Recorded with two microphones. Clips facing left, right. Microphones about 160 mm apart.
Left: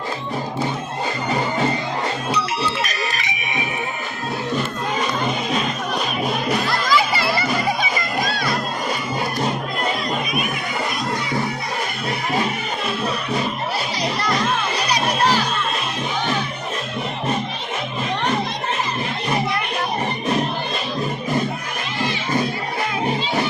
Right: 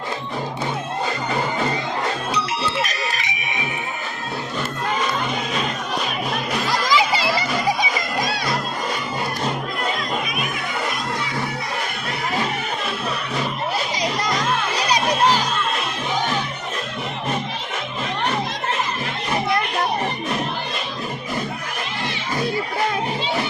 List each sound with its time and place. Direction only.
6.7 s music: 15° right (ahead or behind)